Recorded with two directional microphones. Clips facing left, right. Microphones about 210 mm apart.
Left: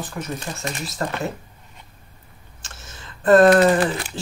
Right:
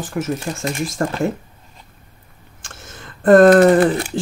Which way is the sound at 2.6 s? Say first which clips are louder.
Right 4 dB; 50° right (ahead or behind).